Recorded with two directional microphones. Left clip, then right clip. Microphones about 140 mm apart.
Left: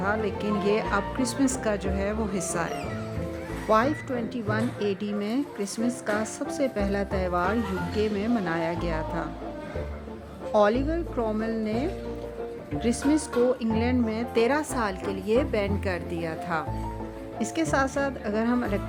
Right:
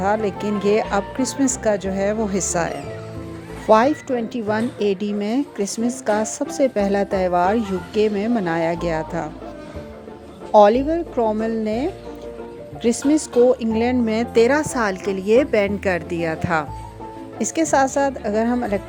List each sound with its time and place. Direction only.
0.0 s a woman's voice: 35° right (ahead or behind)
10.5 s a woman's voice: 35° right (ahead or behind)
14.1 s a woman's voice: 55° right (ahead or behind)
14.4 s a woman's voice: 40° right (ahead or behind)
17.3 s a woman's voice: 35° right (ahead or behind)